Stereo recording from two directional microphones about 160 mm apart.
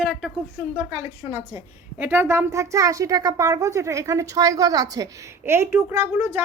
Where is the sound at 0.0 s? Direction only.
5° right (ahead or behind).